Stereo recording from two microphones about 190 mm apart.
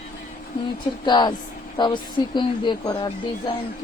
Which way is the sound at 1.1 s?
20° left (ahead or behind).